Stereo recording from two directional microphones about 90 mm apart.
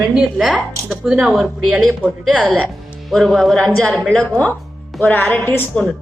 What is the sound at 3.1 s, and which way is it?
A man's voice, centre (ahead or behind).